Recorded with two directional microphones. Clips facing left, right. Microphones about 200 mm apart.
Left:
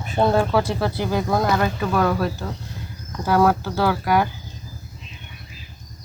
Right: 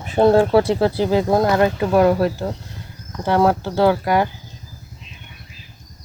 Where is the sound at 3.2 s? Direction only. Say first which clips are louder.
Right 1 dB; 25° right (ahead or behind).